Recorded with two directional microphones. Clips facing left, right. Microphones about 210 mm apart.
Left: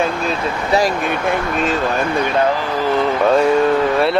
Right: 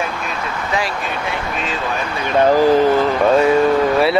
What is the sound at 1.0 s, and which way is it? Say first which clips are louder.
Speech: left 5 dB; 55° left (ahead or behind).